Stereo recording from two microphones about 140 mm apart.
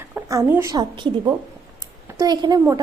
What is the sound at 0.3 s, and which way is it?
Speech, 20° right (ahead or behind).